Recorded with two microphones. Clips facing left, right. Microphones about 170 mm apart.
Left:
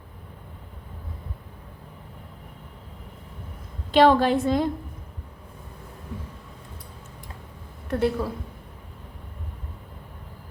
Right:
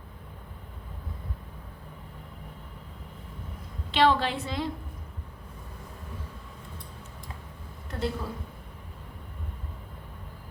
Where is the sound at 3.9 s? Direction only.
45° left (ahead or behind).